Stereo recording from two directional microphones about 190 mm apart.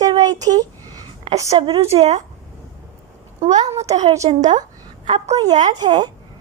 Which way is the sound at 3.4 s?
35° right (ahead or behind).